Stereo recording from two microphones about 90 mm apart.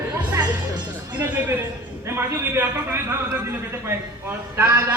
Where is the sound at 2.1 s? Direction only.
25° right (ahead or behind).